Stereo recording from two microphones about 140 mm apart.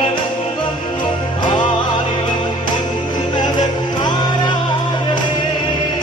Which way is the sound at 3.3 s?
30° left (ahead or behind).